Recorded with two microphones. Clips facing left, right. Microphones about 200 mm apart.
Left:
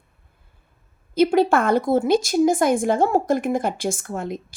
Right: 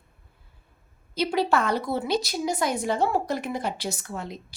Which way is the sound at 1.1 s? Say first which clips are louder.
Left 7 dB; 50° left (ahead or behind).